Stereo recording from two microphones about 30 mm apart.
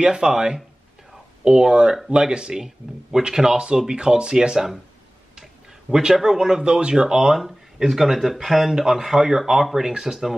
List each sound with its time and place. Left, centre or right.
0.1 s speech: right
5.4 s a sound: right
6.2 s speech: centre
6.6 s speech: right
7.3 s speech: centre